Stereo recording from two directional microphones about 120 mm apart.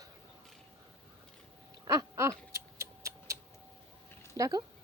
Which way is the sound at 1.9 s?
25° right (ahead or behind).